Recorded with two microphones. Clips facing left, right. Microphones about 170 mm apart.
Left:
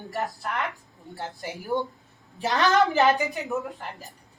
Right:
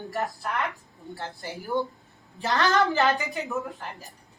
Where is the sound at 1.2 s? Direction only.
20° left (ahead or behind).